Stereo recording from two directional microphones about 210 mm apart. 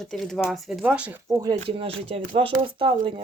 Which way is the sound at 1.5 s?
25° right (ahead or behind).